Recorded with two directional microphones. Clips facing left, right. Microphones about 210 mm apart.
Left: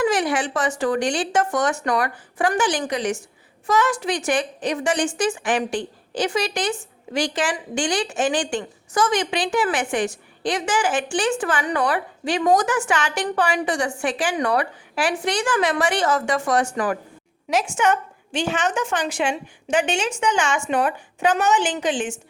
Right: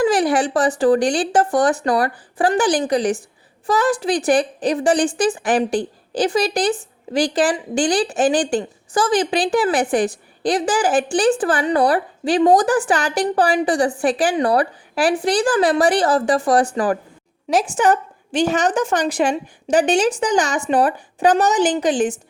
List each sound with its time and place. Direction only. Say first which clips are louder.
0.0 s a woman's voice: right 4 dB; 35° right (ahead or behind)